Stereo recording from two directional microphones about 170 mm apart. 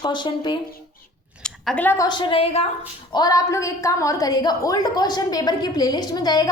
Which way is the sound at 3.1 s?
20° left (ahead or behind).